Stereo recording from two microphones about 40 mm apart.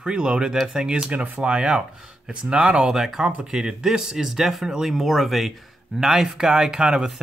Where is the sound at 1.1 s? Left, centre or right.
Right.